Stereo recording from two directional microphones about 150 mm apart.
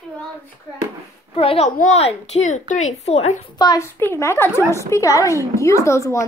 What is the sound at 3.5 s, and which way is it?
A woman's voice, 25° left (ahead or behind).